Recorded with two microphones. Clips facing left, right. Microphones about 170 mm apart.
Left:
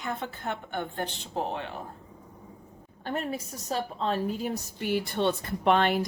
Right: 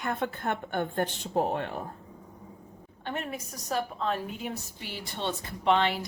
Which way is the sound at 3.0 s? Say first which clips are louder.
Left 3 dB; 40° left (ahead or behind).